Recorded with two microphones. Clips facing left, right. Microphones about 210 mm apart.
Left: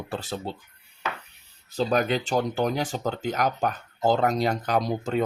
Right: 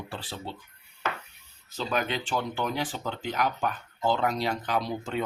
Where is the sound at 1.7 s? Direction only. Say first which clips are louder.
Left 6 dB; 40° left (ahead or behind).